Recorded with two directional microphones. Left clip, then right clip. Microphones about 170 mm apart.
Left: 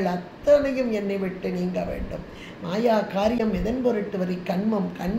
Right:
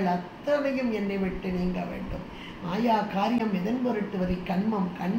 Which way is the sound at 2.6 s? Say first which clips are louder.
Left 4 dB; 70° left (ahead or behind).